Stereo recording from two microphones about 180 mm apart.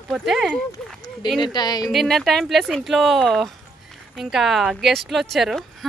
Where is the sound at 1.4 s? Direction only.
25° left (ahead or behind).